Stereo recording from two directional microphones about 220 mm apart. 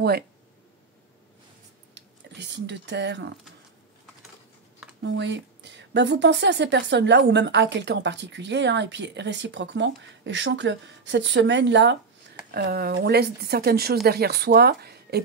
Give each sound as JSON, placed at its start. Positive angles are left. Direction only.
{"t": 2.0, "sound": "speech", "side_deg": -50}
{"t": 5.0, "sound": "speech", "side_deg": -55}